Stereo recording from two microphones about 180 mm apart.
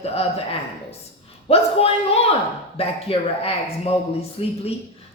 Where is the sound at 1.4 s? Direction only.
35° left (ahead or behind).